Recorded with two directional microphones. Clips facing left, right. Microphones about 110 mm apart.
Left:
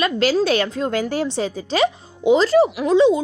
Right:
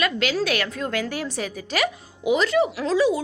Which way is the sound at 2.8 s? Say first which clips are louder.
Left 6 dB; 20° left (ahead or behind).